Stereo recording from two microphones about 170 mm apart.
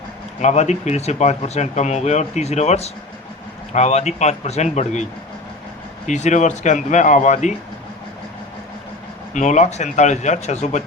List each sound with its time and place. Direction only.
0.4 s speech: 40° left (ahead or behind)
6.1 s speech: 45° left (ahead or behind)
9.3 s speech: 45° left (ahead or behind)